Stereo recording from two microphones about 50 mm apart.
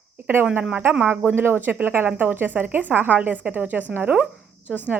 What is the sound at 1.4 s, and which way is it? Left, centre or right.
A woman's voice, right.